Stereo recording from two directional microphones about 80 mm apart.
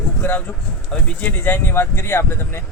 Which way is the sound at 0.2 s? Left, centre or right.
Left.